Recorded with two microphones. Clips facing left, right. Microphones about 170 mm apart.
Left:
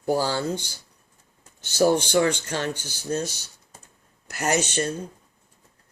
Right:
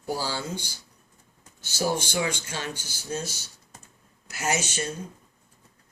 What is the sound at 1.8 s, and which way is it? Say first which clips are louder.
Speech: left 8 dB; 60° left (ahead or behind).